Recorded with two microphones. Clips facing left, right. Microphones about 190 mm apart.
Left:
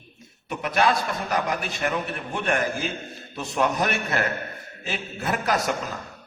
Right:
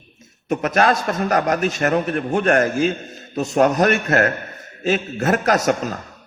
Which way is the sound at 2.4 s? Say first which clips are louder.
Right 8 dB; 75° right (ahead or behind).